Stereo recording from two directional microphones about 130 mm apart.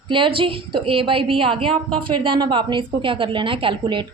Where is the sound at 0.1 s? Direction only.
40° right (ahead or behind).